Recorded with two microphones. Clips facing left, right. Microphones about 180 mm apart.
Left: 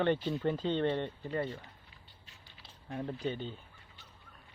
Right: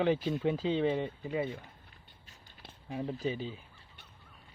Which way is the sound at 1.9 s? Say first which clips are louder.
Right 1 dB; 50° right (ahead or behind).